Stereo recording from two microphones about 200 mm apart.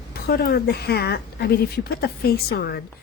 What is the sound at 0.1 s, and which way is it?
A woman's voice, 50° left (ahead or behind).